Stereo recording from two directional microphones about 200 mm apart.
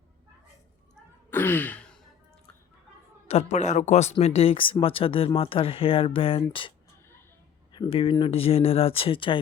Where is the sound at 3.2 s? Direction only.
35° left (ahead or behind).